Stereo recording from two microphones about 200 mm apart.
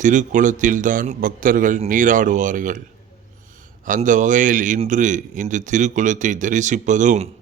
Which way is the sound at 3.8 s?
40° right (ahead or behind).